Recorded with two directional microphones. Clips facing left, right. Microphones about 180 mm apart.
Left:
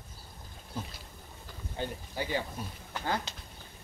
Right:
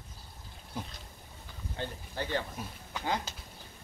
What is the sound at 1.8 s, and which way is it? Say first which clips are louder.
Speech: left 2 dB; 10° left (ahead or behind).